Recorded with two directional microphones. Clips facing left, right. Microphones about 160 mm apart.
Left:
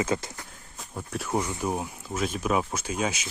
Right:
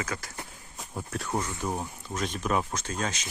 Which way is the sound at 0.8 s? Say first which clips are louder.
Left 1 dB; 5° right (ahead or behind).